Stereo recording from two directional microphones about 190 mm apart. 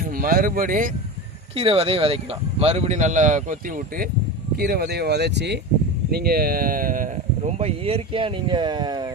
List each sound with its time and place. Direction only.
0.0 s speech: 50° right (ahead or behind)
1.5 s speech: 30° right (ahead or behind)
7.6 s speech: 30° right (ahead or behind)